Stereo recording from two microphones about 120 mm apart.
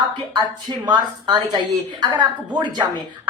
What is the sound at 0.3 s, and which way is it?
A woman's voice, 40° right (ahead or behind).